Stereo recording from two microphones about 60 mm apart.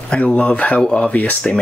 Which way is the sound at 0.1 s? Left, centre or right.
Left.